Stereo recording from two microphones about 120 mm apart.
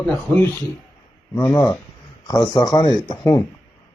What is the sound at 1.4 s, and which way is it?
A man's voice, 35° left (ahead or behind).